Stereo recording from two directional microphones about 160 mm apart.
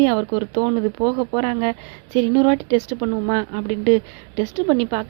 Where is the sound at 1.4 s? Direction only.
40° right (ahead or behind).